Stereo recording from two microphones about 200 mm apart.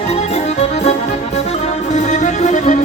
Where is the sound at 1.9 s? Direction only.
35° left (ahead or behind).